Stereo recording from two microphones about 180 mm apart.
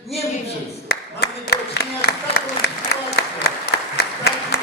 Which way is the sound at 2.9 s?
65° left (ahead or behind).